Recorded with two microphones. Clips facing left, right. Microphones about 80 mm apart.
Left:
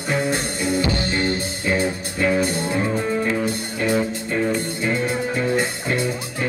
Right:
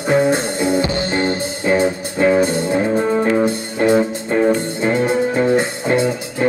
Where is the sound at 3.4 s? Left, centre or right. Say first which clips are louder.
Right 7 dB; right.